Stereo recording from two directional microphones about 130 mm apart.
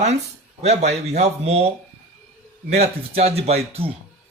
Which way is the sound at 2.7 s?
55° right (ahead or behind).